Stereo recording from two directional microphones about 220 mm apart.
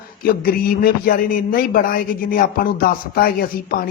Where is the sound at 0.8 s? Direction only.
40° left (ahead or behind).